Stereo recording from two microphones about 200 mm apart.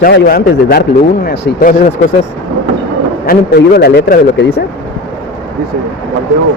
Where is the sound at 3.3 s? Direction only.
50° left (ahead or behind).